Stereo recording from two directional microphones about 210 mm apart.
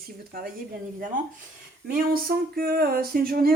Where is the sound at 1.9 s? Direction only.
45° right (ahead or behind).